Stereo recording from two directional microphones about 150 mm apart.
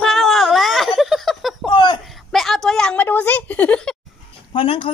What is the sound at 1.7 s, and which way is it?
Speech, 30° left (ahead or behind).